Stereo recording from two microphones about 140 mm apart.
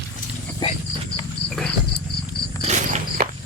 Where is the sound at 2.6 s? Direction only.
55° right (ahead or behind).